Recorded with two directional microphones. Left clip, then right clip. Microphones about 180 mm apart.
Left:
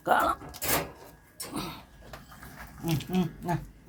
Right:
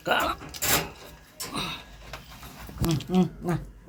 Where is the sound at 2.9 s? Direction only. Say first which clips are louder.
Right 2 dB; 25° right (ahead or behind).